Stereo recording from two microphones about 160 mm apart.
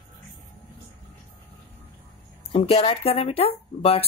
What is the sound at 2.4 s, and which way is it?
Speech, 40° left (ahead or behind).